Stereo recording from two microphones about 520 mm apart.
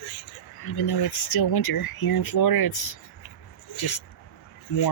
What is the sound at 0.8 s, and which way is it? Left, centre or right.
Speech, left.